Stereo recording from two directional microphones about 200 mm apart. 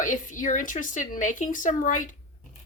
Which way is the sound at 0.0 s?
40° left (ahead or behind).